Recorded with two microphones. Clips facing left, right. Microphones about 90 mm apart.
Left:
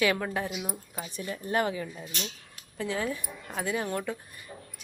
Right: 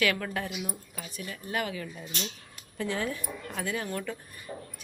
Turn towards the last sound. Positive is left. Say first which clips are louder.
# right 5 dB
turn(degrees=-25)  # may be behind; listen again after turning